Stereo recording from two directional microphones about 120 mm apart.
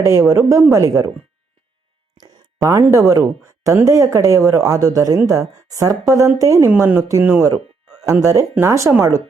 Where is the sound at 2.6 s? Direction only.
25° right (ahead or behind).